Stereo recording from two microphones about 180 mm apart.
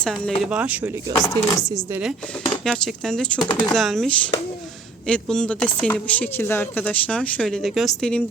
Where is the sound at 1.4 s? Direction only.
25° right (ahead or behind).